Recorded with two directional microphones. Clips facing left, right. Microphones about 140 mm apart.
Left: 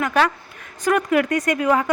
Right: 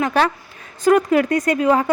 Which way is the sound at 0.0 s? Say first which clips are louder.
Right 1 dB; 30° right (ahead or behind).